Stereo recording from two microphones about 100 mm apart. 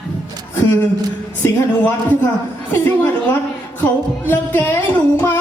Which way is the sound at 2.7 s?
20° left (ahead or behind).